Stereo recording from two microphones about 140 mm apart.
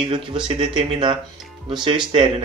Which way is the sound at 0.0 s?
35° right (ahead or behind).